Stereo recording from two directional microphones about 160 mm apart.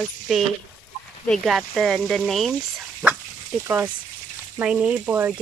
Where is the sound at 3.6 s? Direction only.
10° right (ahead or behind).